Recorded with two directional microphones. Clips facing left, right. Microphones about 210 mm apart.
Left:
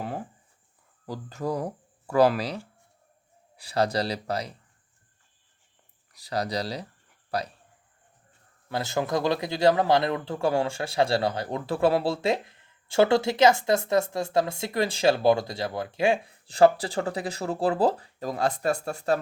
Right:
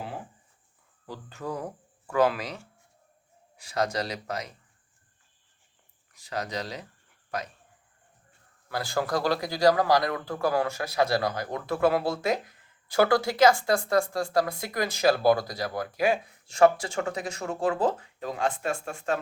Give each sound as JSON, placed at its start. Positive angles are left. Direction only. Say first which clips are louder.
{"t": 1.0, "sound": "speech", "louder": "left 5 dB", "side_deg": 40}
{"t": 3.6, "sound": "speech", "louder": "left 3 dB", "side_deg": 35}
{"t": 6.1, "sound": "speech", "louder": "left 4 dB", "side_deg": 35}
{"t": 8.7, "sound": "a man's voice", "louder": "left 1 dB", "side_deg": 20}